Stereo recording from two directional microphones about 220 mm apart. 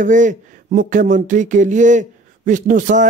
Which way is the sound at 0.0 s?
35° right (ahead or behind).